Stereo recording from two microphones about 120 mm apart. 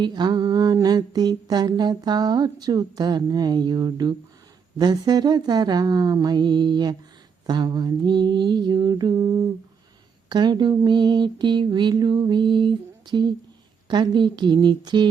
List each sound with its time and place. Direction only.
0.0 s mantra: 35° right (ahead or behind)